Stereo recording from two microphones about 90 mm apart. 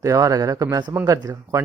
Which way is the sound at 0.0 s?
40° right (ahead or behind).